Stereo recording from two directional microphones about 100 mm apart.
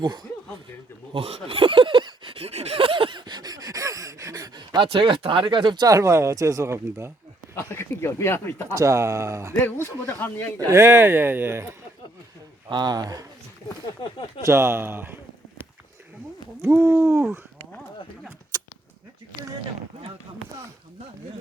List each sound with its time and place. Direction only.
0.0 s speech: 45° right (ahead or behind)
1.1 s speech: 70° right (ahead or behind); by 2.3 s 55° right (ahead or behind)
2.4 s gasp: 90° right; by 5.9 s 50° right (ahead or behind)
5.9 s speech: 30° right (ahead or behind)
7.7 s speech: 25° left (ahead or behind)
8.7 s speech: 30° right (ahead or behind)
9.6 s speech: 25° left (ahead or behind)
10.7 s speech: 25° right (ahead or behind)
12.7 s speech: 45° right (ahead or behind)
14.0 s speech: 50° left (ahead or behind)
14.4 s speech: 25° right (ahead or behind)
16.6 s speech: 25° right (ahead or behind)